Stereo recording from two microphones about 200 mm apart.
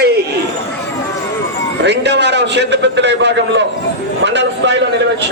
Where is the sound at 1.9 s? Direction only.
60° right (ahead or behind).